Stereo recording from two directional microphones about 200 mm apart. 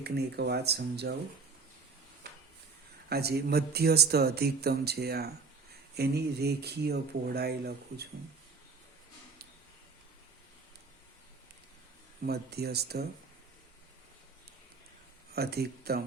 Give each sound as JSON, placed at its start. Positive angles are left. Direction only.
{"t": 0.0, "sound": "speech", "side_deg": -55}
{"t": 3.1, "sound": "speech", "side_deg": -55}
{"t": 12.2, "sound": "speech", "side_deg": -55}
{"t": 15.4, "sound": "speech", "side_deg": -50}